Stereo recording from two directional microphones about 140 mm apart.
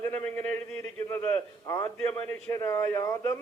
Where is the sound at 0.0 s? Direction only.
15° left (ahead or behind).